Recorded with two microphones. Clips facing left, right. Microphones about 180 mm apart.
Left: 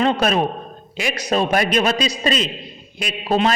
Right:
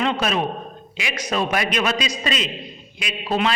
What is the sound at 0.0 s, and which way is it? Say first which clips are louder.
A man's voice: left 4 dB; 45° left (ahead or behind).